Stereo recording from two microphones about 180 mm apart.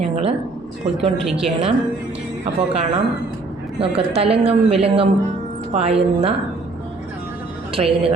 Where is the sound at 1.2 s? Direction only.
Centre (ahead or behind).